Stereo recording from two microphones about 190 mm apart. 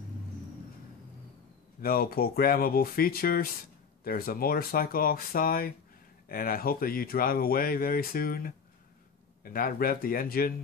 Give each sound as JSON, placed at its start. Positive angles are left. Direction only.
{"t": 1.8, "sound": "speech", "side_deg": 50}